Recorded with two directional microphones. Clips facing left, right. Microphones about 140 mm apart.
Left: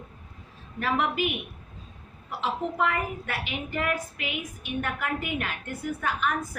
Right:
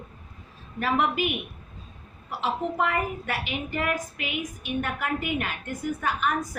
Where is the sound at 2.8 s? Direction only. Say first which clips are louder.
Even; 10° right (ahead or behind).